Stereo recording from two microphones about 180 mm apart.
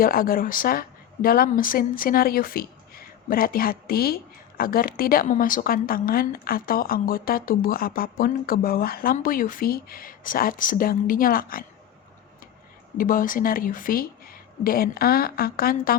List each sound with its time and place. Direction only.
0.0 s a woman's voice: 55° left (ahead or behind)
13.0 s a woman's voice: 50° left (ahead or behind)